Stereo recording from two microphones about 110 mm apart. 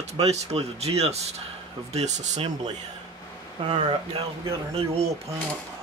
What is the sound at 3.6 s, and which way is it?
Speech, 60° right (ahead or behind).